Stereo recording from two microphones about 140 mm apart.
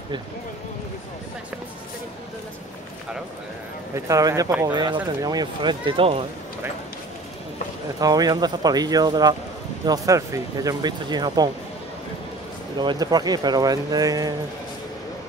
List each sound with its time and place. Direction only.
3.9 s speech: 25° right (ahead or behind); by 6.2 s 40° right (ahead or behind)
8.0 s speech: 30° right (ahead or behind)
12.7 s speech: 30° right (ahead or behind)